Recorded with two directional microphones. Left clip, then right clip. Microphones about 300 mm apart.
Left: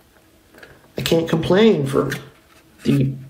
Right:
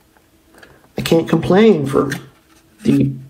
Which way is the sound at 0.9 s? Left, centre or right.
Centre.